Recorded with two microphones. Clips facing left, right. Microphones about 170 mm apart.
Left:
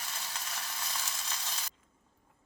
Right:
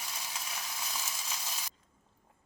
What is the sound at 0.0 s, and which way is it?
Frying, 10° right (ahead or behind).